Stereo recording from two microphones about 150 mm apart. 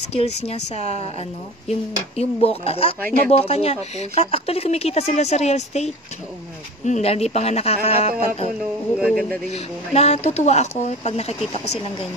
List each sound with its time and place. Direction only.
0.1 s speech: 45° left (ahead or behind)
9.1 s speech: 5° left (ahead or behind)
9.5 s speech: 45° left (ahead or behind)